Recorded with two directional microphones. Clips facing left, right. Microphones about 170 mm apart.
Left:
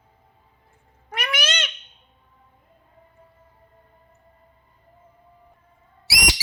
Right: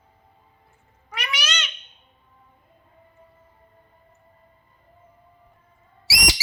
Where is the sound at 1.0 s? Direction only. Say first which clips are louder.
Left 4 dB; 55° left (ahead or behind).